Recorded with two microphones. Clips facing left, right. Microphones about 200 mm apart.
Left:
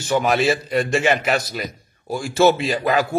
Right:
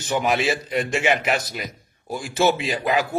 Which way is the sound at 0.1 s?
10° right (ahead or behind).